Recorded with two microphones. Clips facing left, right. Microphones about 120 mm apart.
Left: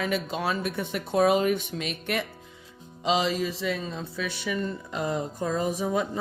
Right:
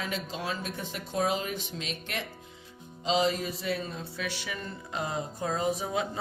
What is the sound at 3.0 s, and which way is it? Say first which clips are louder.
Music: left 2 dB; 85° left.